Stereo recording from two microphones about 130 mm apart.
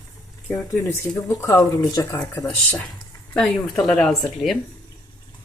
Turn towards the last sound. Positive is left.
turn(degrees=0)  # may be behind; listen again after turning